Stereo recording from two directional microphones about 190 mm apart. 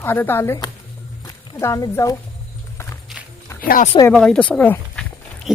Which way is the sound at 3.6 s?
45° left (ahead or behind).